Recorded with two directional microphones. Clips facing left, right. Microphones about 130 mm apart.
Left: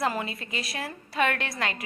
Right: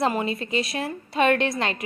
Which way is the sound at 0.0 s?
25° right (ahead or behind).